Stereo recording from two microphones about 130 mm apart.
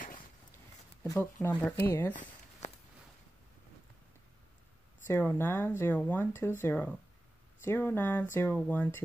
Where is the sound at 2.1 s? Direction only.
70° left (ahead or behind).